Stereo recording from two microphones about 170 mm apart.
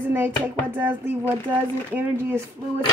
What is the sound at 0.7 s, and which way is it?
Speech, 10° right (ahead or behind).